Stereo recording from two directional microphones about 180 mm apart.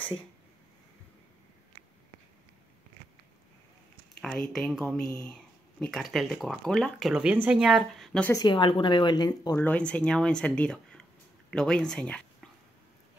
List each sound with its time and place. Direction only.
4.2 s speech: centre (ahead or behind)
8.3 s speech: 25° left (ahead or behind)
9.6 s speech: 5° left (ahead or behind)